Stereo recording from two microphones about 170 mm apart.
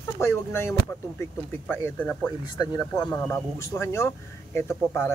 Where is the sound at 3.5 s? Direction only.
15° left (ahead or behind).